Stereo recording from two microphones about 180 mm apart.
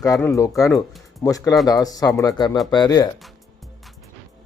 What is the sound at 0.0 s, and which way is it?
Speech, 15° left (ahead or behind).